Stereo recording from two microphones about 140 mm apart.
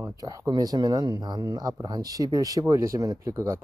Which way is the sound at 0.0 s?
25° right (ahead or behind).